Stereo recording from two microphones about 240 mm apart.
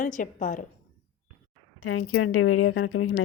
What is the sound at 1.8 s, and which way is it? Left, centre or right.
Speech, left.